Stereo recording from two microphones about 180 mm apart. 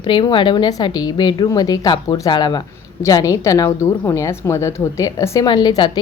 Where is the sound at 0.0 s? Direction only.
25° left (ahead or behind).